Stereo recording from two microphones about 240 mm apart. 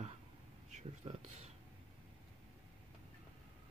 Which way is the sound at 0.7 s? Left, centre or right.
Right.